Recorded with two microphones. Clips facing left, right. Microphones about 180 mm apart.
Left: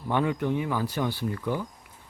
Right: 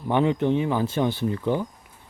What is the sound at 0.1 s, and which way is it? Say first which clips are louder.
Speech: right 5 dB; 25° right (ahead or behind).